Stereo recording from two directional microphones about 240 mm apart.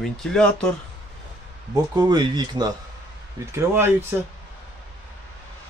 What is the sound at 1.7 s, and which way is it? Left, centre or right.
Speech, centre.